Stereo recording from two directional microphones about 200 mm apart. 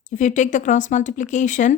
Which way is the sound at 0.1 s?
40° left (ahead or behind).